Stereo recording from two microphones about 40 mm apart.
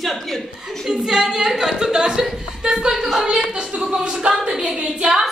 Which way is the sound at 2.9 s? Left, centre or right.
Centre.